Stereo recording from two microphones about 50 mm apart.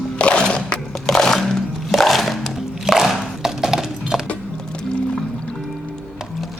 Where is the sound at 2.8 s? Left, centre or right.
Centre.